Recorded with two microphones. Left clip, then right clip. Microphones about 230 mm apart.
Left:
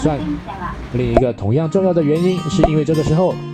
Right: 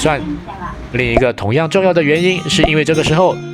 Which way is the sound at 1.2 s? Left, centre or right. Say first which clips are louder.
Right 4 dB; right.